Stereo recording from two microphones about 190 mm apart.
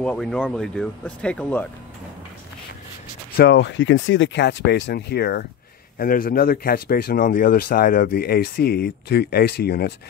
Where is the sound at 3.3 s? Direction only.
60° left (ahead or behind).